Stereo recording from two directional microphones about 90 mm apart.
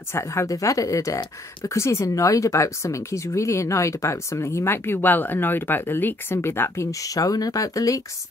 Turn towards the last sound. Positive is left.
turn(degrees=40)  # may be behind; listen again after turning